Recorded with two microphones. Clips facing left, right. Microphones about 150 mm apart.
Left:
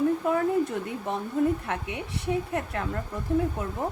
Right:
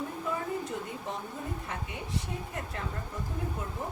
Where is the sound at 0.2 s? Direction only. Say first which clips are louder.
Left 9 dB; 60° left (ahead or behind).